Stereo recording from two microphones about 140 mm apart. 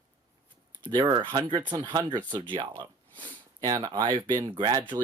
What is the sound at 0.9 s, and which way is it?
Speech, 35° right (ahead or behind).